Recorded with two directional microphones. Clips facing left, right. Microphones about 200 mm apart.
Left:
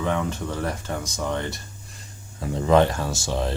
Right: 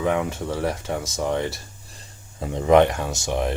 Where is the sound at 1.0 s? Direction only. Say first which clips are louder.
Right 3 dB; 25° right (ahead or behind).